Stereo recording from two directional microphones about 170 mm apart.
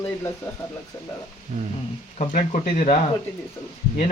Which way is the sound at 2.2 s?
45° left (ahead or behind).